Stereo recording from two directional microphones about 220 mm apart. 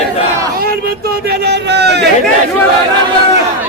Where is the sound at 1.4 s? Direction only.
50° right (ahead or behind).